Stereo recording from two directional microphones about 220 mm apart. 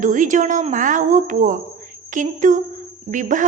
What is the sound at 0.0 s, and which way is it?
A woman's voice, 35° right (ahead or behind).